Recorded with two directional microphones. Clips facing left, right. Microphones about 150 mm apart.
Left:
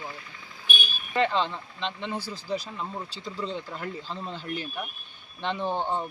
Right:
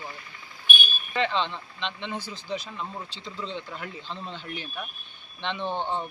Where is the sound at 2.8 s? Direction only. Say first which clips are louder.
Left 1 dB; 5° left (ahead or behind).